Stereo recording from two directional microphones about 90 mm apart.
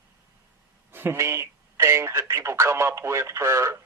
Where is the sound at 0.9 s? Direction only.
25° right (ahead or behind).